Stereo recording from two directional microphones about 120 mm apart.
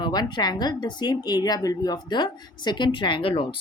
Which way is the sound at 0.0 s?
35° left (ahead or behind).